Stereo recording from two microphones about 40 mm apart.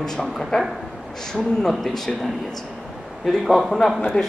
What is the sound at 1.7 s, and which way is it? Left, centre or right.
Speech, centre.